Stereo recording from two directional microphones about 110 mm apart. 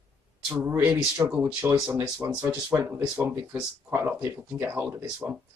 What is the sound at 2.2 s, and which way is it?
Speech, 30° right (ahead or behind).